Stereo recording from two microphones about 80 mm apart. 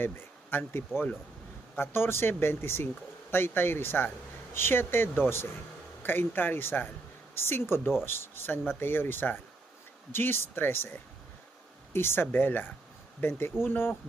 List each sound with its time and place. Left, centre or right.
0.0 s speech: left
11.9 s speech: left